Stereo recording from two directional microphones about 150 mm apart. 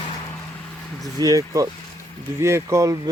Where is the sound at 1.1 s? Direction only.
25° right (ahead or behind).